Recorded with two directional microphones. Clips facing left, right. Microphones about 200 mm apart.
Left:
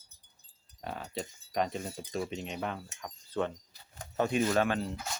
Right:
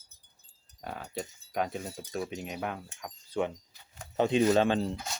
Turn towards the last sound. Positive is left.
turn(degrees=-25)  # may be behind; listen again after turning